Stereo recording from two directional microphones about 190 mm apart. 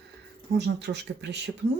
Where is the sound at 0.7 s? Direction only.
65° right (ahead or behind).